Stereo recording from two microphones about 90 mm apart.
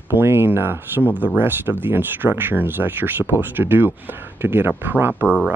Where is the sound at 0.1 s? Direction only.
25° right (ahead or behind).